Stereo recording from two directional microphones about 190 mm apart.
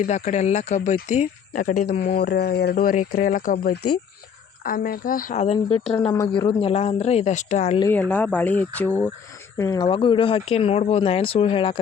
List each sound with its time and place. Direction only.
0.0 s speech: 35° left (ahead or behind)
7.8 s speech: 10° left (ahead or behind)
9.8 s speech: 25° left (ahead or behind)